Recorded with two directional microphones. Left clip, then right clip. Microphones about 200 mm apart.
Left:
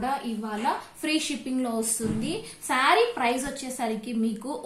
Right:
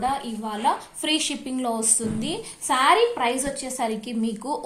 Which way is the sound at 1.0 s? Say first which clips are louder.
Right 3 dB; 30° right (ahead or behind).